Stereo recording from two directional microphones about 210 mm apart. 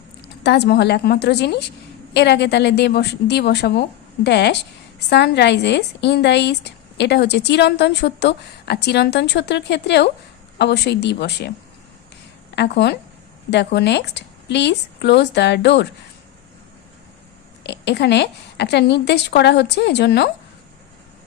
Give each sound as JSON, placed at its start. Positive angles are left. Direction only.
{"t": 0.4, "sound": "a woman's voice", "side_deg": 50}
{"t": 12.5, "sound": "a woman's voice", "side_deg": 50}
{"t": 17.6, "sound": "a woman's voice", "side_deg": 55}